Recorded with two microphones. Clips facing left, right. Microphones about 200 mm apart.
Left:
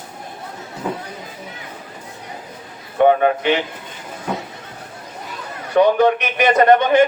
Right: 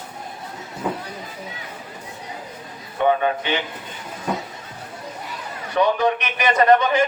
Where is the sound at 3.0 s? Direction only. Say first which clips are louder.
Left 6 dB; 60° left (ahead or behind).